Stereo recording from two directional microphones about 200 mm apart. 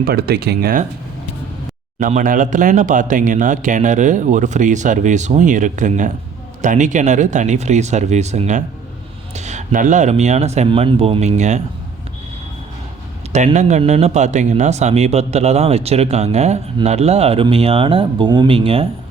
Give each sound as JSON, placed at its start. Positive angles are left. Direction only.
{"t": 0.0, "sound": "speech", "side_deg": -50}
{"t": 2.0, "sound": "speech", "side_deg": -40}
{"t": 13.3, "sound": "speech", "side_deg": -35}